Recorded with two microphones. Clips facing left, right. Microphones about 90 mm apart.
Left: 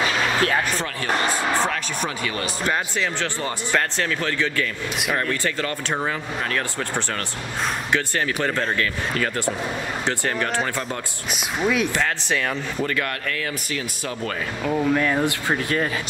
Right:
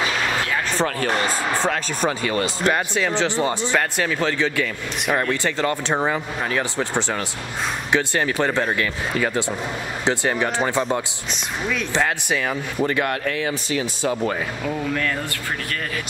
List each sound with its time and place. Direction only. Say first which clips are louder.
2.0 s speech: right 5 dB; 35° right (ahead or behind)
3.2 s speech: right 6 dB; 20° right (ahead or behind)
12.3 s speech: right 1 dB; 5° right (ahead or behind)
12.8 s speech: right 6 dB; 20° right (ahead or behind)
14.7 s speech: left 5 dB; 15° left (ahead or behind)